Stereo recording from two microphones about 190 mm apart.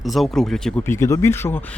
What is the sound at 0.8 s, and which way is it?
Speech, 15° left (ahead or behind).